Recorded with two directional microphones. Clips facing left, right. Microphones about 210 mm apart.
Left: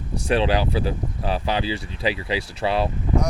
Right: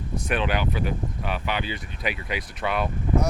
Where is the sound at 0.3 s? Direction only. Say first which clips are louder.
Left 5 dB; 30° left (ahead or behind).